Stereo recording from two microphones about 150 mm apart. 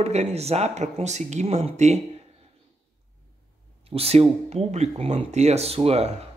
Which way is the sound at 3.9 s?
40° right (ahead or behind).